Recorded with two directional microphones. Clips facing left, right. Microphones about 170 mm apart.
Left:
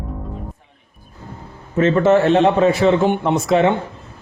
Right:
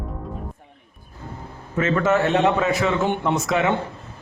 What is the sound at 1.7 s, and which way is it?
Speech, 30° left (ahead or behind).